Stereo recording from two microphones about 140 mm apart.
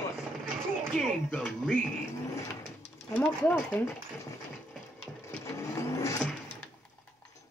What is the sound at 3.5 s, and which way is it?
Speech, 10° left (ahead or behind).